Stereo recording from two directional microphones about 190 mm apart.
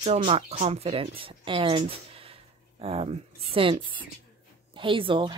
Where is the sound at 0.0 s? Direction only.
30° right (ahead or behind).